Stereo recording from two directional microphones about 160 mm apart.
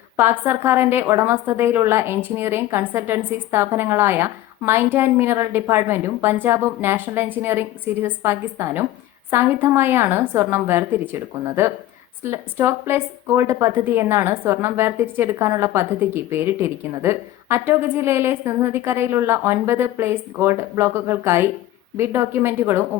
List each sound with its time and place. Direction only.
0.2 s speech: 15° right (ahead or behind)